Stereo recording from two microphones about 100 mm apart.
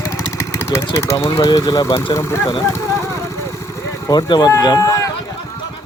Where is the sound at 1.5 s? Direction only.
40° left (ahead or behind).